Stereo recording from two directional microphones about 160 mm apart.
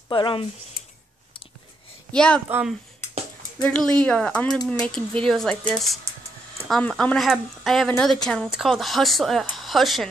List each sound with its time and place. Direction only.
0.1 s speech: 30° left (ahead or behind)
0.8 s a sound: 70° left (ahead or behind)
2.1 s speech: 5° left (ahead or behind)
3.6 s a woman's voice: 5° left (ahead or behind)